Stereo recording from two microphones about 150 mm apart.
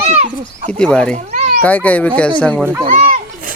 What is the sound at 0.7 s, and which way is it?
Speech, 5° left (ahead or behind).